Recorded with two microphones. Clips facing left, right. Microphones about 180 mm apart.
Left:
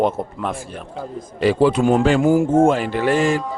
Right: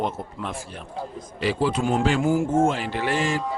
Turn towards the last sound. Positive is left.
turn(degrees=50)  # may be behind; listen again after turning